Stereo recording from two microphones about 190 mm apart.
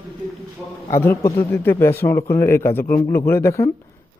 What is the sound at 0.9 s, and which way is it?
A man's voice, 15° left (ahead or behind).